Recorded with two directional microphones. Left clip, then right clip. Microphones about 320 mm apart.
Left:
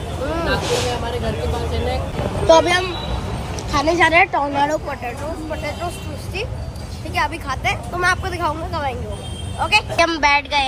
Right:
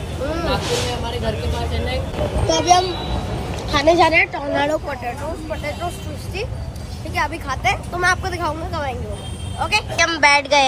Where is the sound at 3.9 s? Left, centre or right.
Left.